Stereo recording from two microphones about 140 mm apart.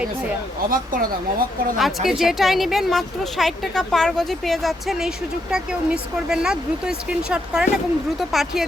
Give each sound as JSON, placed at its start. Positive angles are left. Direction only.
{"t": 0.7, "sound": "speech", "side_deg": -90}
{"t": 1.8, "sound": "a woman's voice", "side_deg": 0}